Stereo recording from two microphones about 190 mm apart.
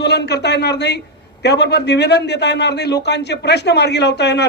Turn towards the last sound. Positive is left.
turn(degrees=65)  # may be behind; listen again after turning